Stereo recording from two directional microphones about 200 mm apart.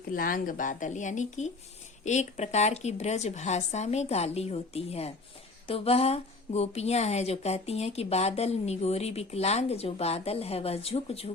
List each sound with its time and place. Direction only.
0.1 s a woman's voice: 45° left (ahead or behind)